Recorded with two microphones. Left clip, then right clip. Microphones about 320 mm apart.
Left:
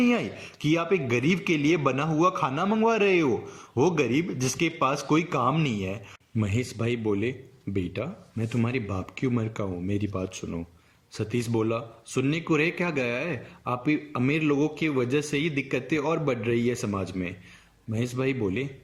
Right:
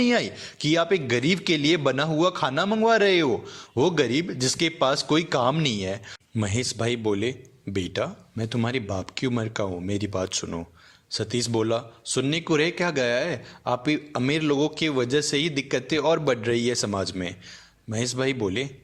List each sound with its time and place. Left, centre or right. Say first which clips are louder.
0.0 s a man's voice: right 3 dB; centre